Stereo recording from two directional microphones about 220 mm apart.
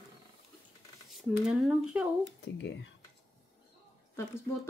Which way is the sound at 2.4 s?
50° left (ahead or behind).